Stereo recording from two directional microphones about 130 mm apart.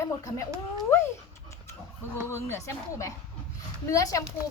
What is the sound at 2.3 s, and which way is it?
Speech, 20° left (ahead or behind).